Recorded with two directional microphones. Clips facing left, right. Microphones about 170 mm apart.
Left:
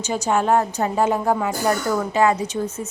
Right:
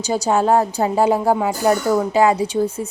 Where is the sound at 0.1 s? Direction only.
35° right (ahead or behind).